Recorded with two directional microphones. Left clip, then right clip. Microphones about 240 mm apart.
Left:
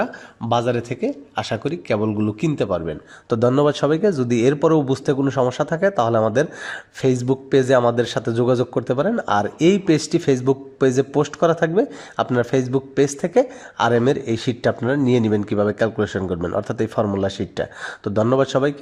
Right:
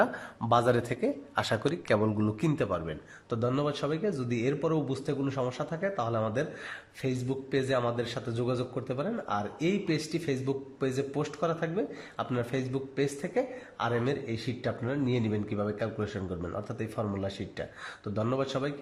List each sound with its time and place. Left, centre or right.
0.0 s speech: centre; by 18.7 s left